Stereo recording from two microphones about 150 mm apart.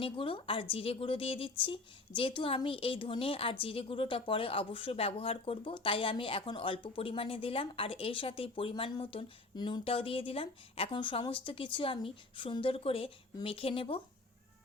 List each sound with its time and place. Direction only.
0.0 s speech: 35° left (ahead or behind)